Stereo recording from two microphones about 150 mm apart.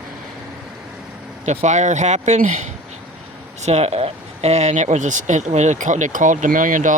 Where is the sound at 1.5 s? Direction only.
50° right (ahead or behind).